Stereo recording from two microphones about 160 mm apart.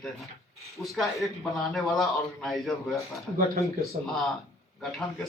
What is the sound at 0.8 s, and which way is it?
Speech, centre (ahead or behind).